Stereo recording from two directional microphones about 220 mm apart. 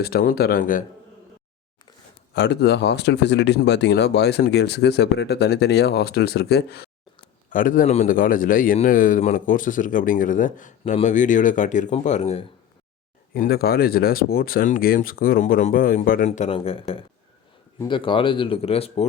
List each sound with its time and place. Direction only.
0.0 s a man's voice: 45° left (ahead or behind)
2.3 s a man's voice: 50° left (ahead or behind); by 12.5 s 30° left (ahead or behind)
13.3 s a man's voice: 45° left (ahead or behind); by 19.0 s 25° left (ahead or behind)